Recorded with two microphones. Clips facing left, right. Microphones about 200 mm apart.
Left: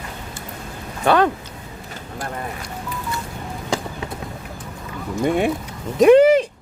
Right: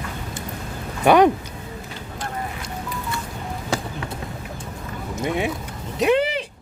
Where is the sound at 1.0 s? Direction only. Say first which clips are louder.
Right 3 dB; 15° right (ahead or behind).